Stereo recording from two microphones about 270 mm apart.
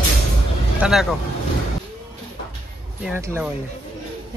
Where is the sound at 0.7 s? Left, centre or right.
Centre.